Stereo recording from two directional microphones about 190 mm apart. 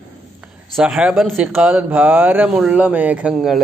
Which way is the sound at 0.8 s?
5° right (ahead or behind).